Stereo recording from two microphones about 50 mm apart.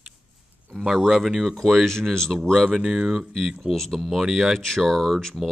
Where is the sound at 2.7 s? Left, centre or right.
Centre.